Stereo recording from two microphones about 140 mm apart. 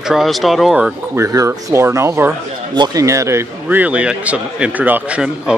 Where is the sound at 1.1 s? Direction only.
25° right (ahead or behind).